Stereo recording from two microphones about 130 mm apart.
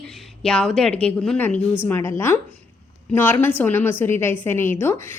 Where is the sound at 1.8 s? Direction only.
15° left (ahead or behind).